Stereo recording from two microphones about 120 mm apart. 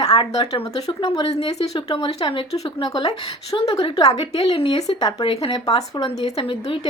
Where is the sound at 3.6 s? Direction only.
50° left (ahead or behind).